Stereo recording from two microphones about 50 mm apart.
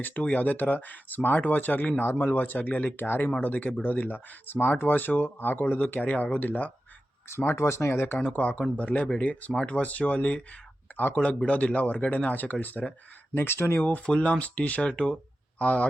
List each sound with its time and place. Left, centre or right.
0.0 s speech: left
3.0 s speech: left
3.4 s speech: left
7.3 s speech: left
8.3 s speech: left
13.3 s speech: left
13.7 s speech: left